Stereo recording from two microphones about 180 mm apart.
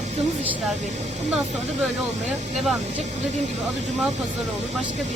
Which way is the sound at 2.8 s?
35° right (ahead or behind).